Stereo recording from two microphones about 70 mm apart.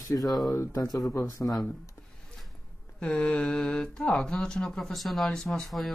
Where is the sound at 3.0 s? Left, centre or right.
Centre.